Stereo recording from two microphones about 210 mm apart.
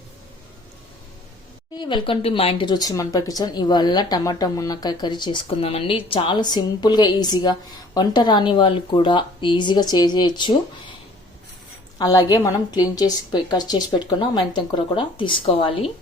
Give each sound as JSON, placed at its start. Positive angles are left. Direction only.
{"t": 1.7, "sound": "speech", "side_deg": 20}
{"t": 11.9, "sound": "speech", "side_deg": 15}